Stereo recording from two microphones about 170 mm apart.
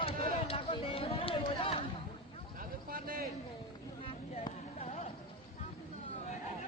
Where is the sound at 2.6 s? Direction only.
60° right (ahead or behind).